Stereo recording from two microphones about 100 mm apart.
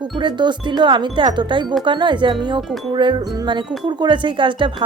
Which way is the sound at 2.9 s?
50° right (ahead or behind).